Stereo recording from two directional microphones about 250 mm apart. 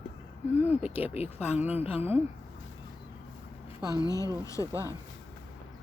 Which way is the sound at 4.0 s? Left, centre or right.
Centre.